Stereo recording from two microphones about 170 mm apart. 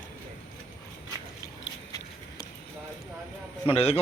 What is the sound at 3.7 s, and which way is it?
Speech, 35° left (ahead or behind).